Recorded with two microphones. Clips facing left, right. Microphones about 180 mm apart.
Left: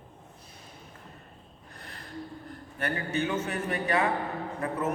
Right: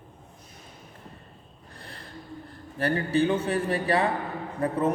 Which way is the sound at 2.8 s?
30° right (ahead or behind).